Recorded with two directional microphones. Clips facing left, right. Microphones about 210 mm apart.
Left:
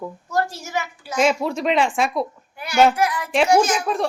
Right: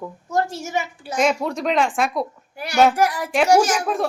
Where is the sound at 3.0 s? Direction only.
45° right (ahead or behind).